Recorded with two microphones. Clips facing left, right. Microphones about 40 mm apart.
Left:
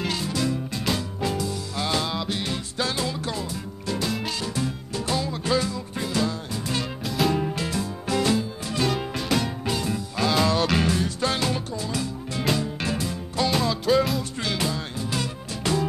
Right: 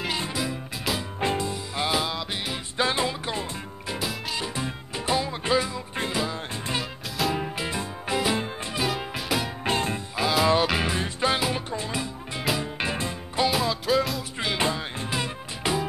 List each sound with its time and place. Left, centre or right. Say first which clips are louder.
0.3 s music: left 4 dB; centre
1.2 s music: right 4 dB; right
1.9 s music: left 1 dB; centre
6.8 s music: left 3 dB; centre
7.3 s music: left 3 dB; centre
8.7 s music: left 3 dB; centre
9.7 s music: right 1 dB; right
10.1 s music: right 1 dB; centre
11.7 s music: left 1 dB; right
13.5 s music: left 4 dB; centre
14.4 s music: right 5 dB; right